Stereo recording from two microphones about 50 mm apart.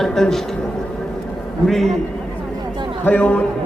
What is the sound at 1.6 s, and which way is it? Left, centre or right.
Speech, centre.